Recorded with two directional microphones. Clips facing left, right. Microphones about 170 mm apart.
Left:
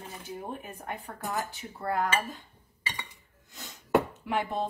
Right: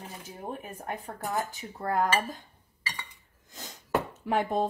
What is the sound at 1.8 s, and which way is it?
Speech, 45° right (ahead or behind).